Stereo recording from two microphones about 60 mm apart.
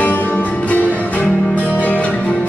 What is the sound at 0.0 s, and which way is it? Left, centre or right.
Music, left.